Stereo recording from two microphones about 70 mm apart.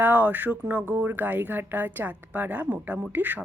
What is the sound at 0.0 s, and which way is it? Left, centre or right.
Speech, right.